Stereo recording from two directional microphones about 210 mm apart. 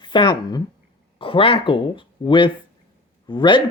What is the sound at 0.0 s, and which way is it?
A woman's voice, 20° left (ahead or behind).